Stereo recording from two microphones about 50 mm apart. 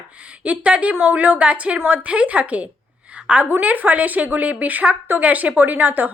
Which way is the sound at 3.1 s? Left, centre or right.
Right.